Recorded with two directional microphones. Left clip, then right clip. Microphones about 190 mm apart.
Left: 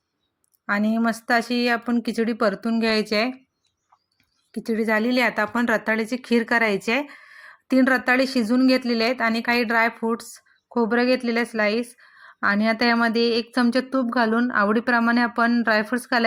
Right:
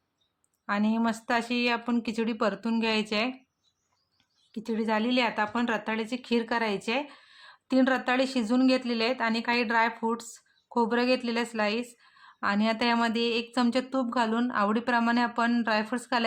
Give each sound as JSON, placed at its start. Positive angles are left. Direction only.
{"t": 0.7, "sound": "speech", "side_deg": 15}
{"t": 4.5, "sound": "a woman's voice", "side_deg": 15}